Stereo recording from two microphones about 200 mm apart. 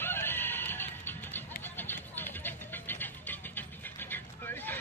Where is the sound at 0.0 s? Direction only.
10° left (ahead or behind).